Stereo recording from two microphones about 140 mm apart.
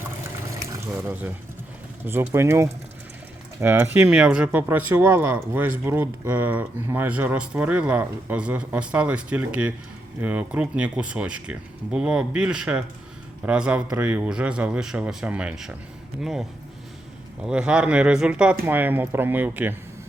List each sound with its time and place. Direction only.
0.7 s speech: 15° right (ahead or behind)